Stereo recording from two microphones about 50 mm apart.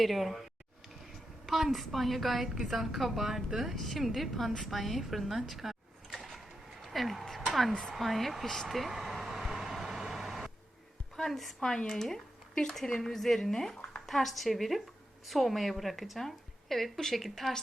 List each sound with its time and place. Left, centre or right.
0.0 s a woman's voice: centre
1.5 s a woman's voice: centre
7.7 s speech: centre
7.9 s a woman's voice: centre
8.6 s vehicle: centre
11.2 s a woman's voice: centre
11.7 s a woman's voice: centre